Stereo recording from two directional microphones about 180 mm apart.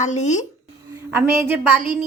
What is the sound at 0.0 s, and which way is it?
Speech, 40° left (ahead or behind).